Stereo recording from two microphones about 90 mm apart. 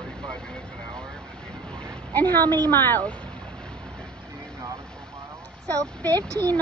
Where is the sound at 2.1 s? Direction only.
20° left (ahead or behind).